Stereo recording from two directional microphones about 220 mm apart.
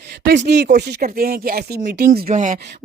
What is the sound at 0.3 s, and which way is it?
A woman's voice, 55° right (ahead or behind).